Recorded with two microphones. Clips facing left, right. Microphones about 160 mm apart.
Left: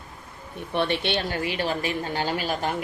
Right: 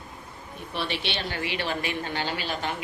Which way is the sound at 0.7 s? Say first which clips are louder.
Left 6 dB; 55° left (ahead or behind).